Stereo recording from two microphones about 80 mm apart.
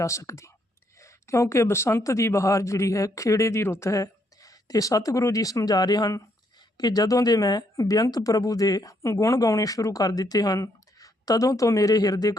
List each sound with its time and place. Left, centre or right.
0.0 s speech: left